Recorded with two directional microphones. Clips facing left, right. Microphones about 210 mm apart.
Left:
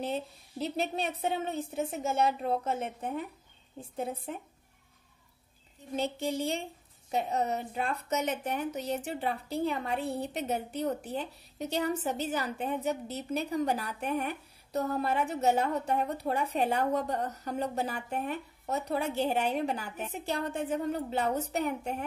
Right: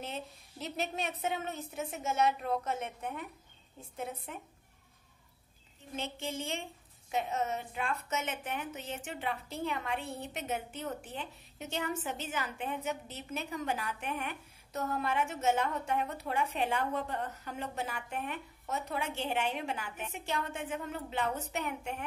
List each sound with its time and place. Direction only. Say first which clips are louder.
0.0 s a woman's voice: left 7 dB; 35° left (ahead or behind)
5.9 s a woman's voice: left 7 dB; 35° left (ahead or behind)